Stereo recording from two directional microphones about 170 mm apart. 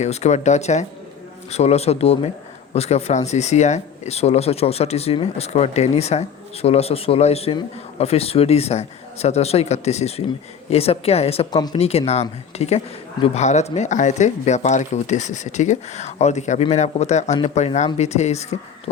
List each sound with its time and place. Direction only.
0.0 s speech: 40° left (ahead or behind)